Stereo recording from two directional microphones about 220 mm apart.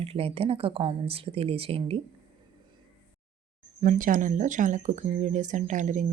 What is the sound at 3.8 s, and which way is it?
Speech, 35° right (ahead or behind).